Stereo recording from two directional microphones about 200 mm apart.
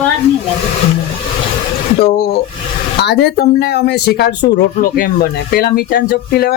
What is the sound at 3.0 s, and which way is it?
Speech, 55° left (ahead or behind).